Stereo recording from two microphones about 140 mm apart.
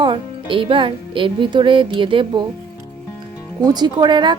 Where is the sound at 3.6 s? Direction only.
30° right (ahead or behind).